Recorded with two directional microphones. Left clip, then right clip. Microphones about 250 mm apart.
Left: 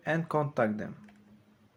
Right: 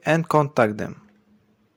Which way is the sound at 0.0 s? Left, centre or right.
Right.